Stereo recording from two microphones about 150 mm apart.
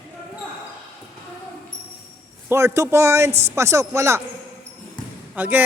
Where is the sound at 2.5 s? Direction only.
20° right (ahead or behind).